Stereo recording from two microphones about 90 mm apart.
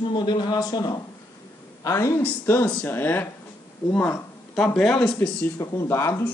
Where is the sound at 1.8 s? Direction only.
35° left (ahead or behind).